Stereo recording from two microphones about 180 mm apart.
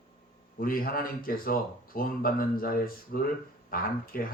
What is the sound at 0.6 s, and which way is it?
A man's voice, 55° left (ahead or behind).